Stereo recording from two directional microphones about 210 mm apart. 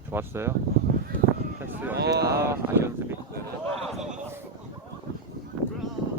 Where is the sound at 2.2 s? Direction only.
15° right (ahead or behind).